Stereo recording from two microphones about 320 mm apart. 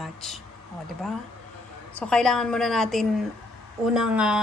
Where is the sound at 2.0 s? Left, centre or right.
Centre.